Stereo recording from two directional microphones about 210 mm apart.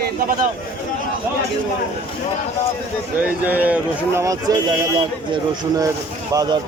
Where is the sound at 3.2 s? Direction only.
10° right (ahead or behind).